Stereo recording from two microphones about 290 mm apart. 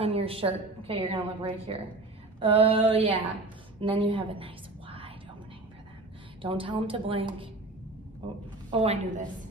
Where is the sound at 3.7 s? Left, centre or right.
Centre.